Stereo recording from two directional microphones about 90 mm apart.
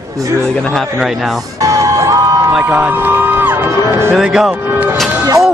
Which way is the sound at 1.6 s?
35° right (ahead or behind).